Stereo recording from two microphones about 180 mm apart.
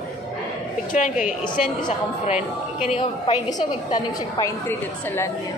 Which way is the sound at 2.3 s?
40° left (ahead or behind).